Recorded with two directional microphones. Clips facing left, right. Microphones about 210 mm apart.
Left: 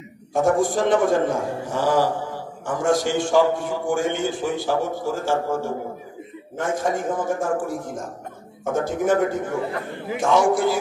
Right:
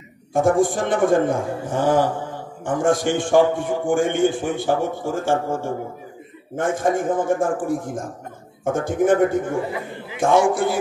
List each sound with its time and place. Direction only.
0.4 s a man's voice: 50° right (ahead or behind)